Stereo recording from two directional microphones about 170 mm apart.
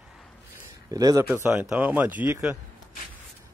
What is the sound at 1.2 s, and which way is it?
Speech, 10° right (ahead or behind).